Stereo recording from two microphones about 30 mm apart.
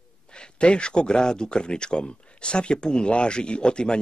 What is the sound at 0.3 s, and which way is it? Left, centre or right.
A man's voice, left.